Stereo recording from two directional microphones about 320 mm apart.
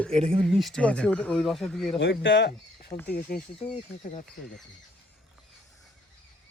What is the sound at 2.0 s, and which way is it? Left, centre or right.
Speech, left.